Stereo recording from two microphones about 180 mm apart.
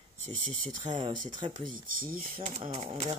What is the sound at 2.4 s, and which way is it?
Speech, 40° right (ahead or behind).